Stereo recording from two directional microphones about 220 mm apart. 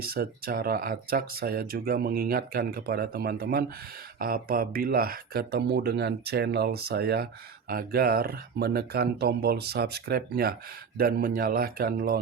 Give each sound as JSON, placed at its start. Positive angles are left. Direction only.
{"t": 0.0, "sound": "speech", "side_deg": -45}